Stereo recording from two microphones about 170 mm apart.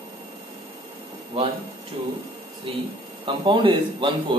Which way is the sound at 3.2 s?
30° right (ahead or behind).